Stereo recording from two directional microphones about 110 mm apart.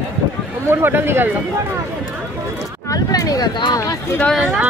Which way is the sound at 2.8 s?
35° left (ahead or behind).